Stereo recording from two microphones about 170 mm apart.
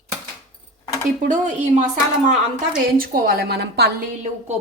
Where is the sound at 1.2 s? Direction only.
45° right (ahead or behind).